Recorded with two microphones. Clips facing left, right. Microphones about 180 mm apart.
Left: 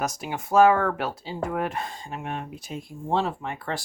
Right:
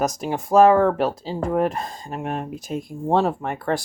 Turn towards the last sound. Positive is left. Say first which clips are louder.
# right 7 dB
turn(degrees=-50)  # may be behind; listen again after turning